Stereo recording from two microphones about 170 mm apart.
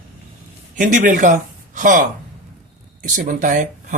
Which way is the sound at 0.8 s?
50° right (ahead or behind).